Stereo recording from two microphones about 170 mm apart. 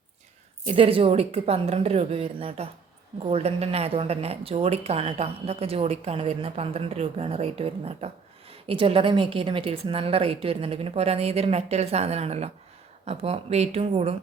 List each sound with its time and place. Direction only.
0.6 s a woman's voice: 30° right (ahead or behind)